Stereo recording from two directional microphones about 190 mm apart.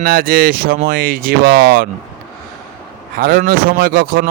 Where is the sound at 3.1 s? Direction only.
50° right (ahead or behind).